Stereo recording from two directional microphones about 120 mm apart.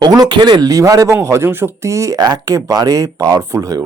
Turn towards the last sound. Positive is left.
turn(degrees=-30)  # may be behind; listen again after turning